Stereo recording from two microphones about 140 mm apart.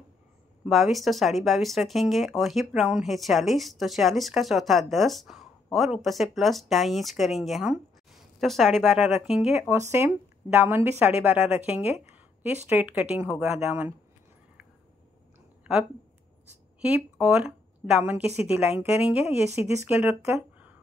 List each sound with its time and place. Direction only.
0.7 s speech: centre (ahead or behind)
9.6 s speech: 20° right (ahead or behind)
16.8 s speech: 10° right (ahead or behind)
20.3 s a sound: 10° right (ahead or behind)